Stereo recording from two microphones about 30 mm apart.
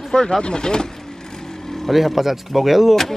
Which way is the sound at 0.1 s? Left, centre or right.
Left.